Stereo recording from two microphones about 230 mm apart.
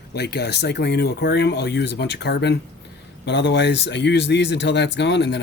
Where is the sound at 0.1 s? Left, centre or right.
Left.